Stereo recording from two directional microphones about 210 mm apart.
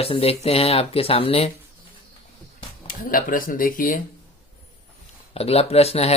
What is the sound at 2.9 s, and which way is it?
Speech, 40° left (ahead or behind).